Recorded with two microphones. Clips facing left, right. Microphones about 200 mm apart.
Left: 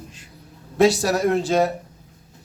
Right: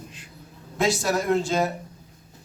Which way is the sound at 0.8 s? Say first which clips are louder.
Left 6 dB; 35° left (ahead or behind).